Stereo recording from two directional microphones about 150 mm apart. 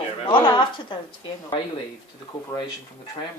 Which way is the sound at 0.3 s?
35° left (ahead or behind).